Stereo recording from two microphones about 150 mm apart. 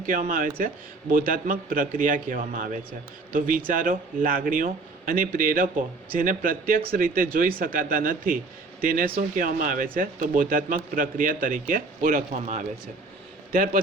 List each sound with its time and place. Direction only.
0.0 s a man's voice: 60° right (ahead or behind)
9.3 s a man's voice: 65° right (ahead or behind)